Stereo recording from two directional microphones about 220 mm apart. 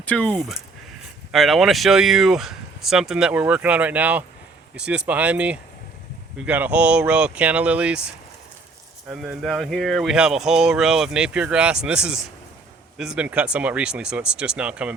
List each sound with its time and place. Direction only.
0.0 s speech: 5° left (ahead or behind)